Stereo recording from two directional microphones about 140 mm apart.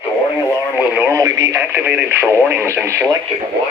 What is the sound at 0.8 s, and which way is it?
Speech, 15° right (ahead or behind).